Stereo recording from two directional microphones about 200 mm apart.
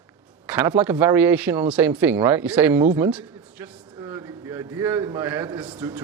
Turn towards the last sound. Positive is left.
turn(degrees=-10)  # may be behind; listen again after turning